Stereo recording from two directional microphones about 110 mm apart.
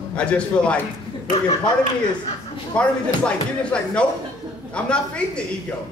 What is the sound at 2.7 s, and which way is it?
Speech, 10° left (ahead or behind).